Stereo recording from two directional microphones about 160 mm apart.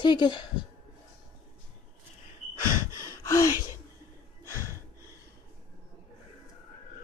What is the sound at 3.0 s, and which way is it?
Gasp, 20° left (ahead or behind).